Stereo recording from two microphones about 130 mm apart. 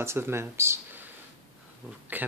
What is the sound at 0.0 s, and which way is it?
Speech, 20° right (ahead or behind).